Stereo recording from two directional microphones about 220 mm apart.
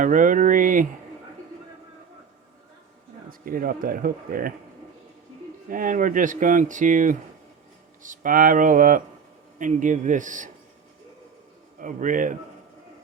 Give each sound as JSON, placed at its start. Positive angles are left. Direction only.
{"t": 0.0, "sound": "speech", "side_deg": -35}
{"t": 3.2, "sound": "speech", "side_deg": -40}
{"t": 5.6, "sound": "speech", "side_deg": -40}
{"t": 11.8, "sound": "speech", "side_deg": -35}